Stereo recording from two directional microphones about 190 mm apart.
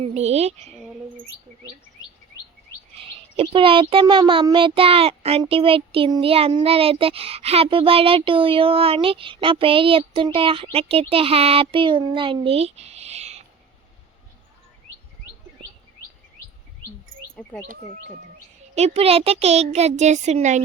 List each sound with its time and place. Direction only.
0.0 s speech: 35° right (ahead or behind)
3.3 s a child's voice: 30° right (ahead or behind)
18.7 s speech: 35° right (ahead or behind)